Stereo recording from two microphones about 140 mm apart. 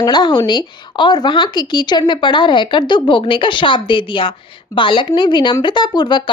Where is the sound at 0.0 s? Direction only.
30° left (ahead or behind).